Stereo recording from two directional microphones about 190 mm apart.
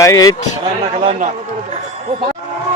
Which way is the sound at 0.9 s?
30° right (ahead or behind).